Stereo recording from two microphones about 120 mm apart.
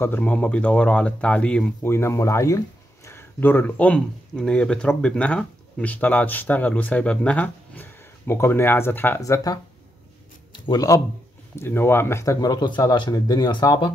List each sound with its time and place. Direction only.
0.0 s speech: 15° left (ahead or behind)
1.9 s speech: 20° left (ahead or behind)
9.2 s a man's voice: 30° left (ahead or behind)
11.5 s speech: 20° left (ahead or behind); by 13.9 s 35° left (ahead or behind)